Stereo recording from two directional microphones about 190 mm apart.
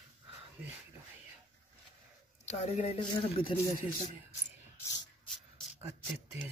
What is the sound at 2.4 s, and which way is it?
Speech, 35° left (ahead or behind).